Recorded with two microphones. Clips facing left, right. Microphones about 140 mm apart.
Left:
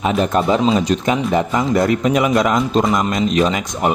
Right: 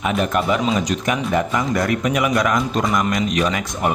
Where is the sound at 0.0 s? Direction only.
30° left (ahead or behind).